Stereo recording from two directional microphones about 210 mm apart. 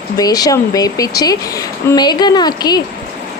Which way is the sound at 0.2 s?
15° left (ahead or behind).